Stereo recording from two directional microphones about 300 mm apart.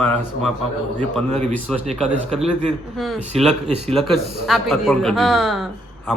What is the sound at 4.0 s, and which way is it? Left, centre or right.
A man's voice, centre.